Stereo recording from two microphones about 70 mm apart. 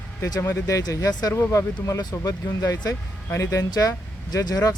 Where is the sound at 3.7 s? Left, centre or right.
Left.